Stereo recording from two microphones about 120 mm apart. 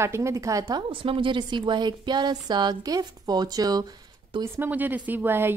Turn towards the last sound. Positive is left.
turn(degrees=-15)  # may be behind; listen again after turning